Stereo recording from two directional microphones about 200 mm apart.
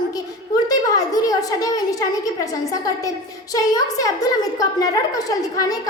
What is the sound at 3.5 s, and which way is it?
A woman's voice, 15° left (ahead or behind).